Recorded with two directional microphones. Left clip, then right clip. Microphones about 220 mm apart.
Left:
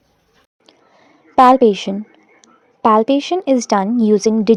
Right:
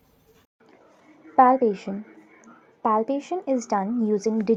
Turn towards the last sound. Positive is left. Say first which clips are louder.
# left 10 dB
turn(degrees=70)  # may be behind; listen again after turning